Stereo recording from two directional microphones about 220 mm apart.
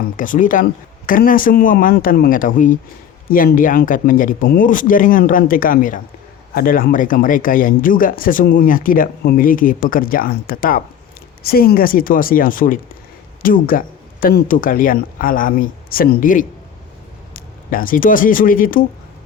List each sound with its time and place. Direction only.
0.2 s speech: 35° left (ahead or behind)